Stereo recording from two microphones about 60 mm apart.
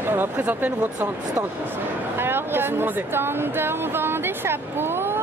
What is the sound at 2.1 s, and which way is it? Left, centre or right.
Speech, right.